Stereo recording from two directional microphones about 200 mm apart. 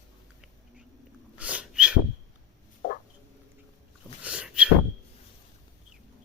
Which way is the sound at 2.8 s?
45° left (ahead or behind).